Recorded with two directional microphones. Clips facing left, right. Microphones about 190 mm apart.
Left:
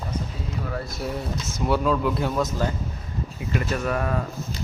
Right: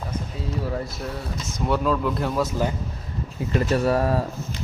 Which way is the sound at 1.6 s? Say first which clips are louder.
Even; centre (ahead or behind).